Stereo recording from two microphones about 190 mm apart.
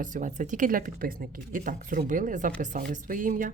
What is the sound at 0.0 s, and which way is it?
A woman's voice, 45° right (ahead or behind).